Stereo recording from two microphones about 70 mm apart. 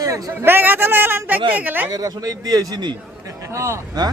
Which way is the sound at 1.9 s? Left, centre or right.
Right.